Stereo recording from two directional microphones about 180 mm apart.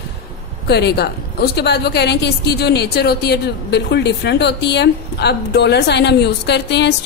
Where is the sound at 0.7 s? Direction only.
65° left (ahead or behind).